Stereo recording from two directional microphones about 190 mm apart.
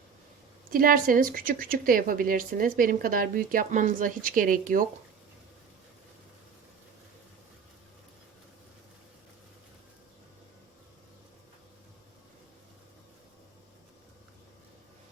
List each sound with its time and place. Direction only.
0.7 s speech: 50° right (ahead or behind)